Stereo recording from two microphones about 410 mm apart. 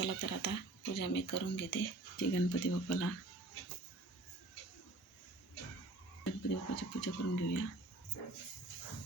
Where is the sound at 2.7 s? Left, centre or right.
Left.